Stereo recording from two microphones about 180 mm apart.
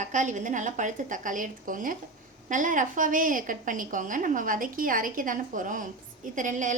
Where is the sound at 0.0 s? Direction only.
45° right (ahead or behind).